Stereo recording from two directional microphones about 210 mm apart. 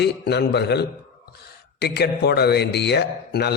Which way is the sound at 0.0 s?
50° left (ahead or behind).